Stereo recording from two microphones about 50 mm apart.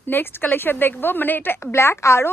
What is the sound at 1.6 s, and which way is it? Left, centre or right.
Speech, left.